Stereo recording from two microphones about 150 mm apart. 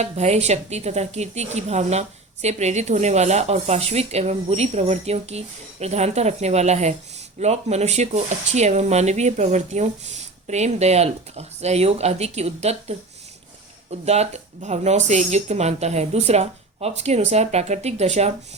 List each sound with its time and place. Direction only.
0.0 s a woman's voice: 45° right (ahead or behind)
14.0 s a woman's voice: 45° right (ahead or behind)